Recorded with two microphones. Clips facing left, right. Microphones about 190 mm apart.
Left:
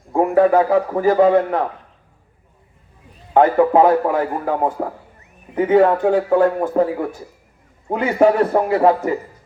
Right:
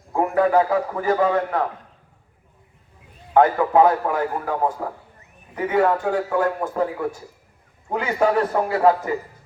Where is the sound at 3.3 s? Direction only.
25° left (ahead or behind).